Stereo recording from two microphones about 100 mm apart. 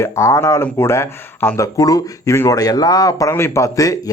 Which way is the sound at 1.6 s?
35° left (ahead or behind).